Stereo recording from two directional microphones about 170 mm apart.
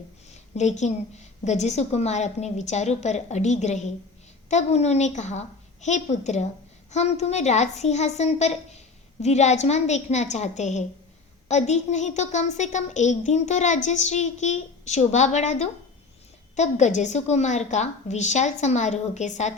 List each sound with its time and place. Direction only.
0.3 s a woman's voice: 40° left (ahead or behind)